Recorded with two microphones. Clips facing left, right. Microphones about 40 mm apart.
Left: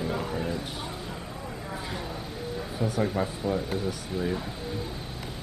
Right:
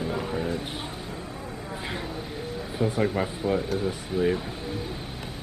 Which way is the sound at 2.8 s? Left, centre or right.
Right.